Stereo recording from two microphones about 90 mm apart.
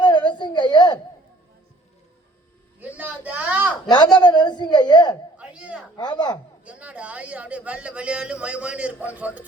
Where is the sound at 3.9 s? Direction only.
55° left (ahead or behind).